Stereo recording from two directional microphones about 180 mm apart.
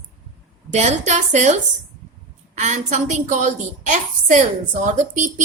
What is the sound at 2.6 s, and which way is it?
A woman's voice, 40° right (ahead or behind).